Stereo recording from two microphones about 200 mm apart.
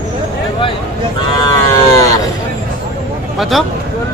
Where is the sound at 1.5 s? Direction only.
15° left (ahead or behind).